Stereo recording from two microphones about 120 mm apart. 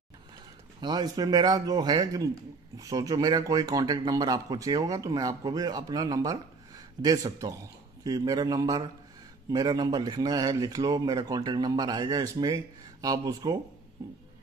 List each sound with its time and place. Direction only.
0.7 s a man's voice: 40° right (ahead or behind)